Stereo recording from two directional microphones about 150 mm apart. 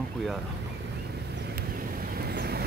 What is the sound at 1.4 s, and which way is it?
Vehicle, 75° right (ahead or behind).